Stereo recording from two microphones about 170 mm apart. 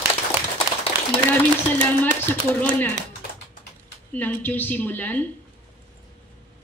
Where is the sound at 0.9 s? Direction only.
15° right (ahead or behind).